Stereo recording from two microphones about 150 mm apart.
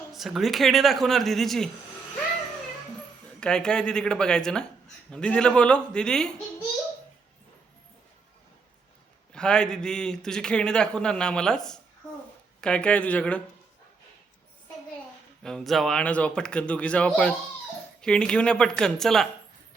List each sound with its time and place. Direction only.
0.1 s a man's voice: centre (ahead or behind)
3.4 s a man's voice: 5° left (ahead or behind)
9.3 s a man's voice: 5° left (ahead or behind)
15.4 s a man's voice: centre (ahead or behind)